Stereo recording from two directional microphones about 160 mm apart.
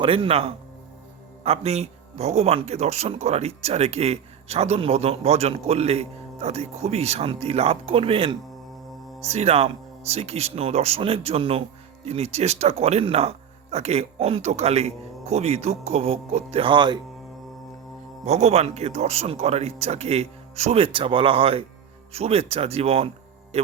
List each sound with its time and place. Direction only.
0.0 s speech: 35° right (ahead or behind)
18.3 s speech: 40° right (ahead or behind)